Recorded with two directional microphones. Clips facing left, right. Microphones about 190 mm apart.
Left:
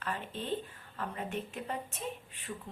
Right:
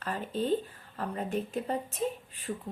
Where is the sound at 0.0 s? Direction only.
40° right (ahead or behind).